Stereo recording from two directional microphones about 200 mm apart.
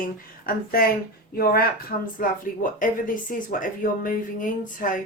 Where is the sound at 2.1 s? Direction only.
40° left (ahead or behind).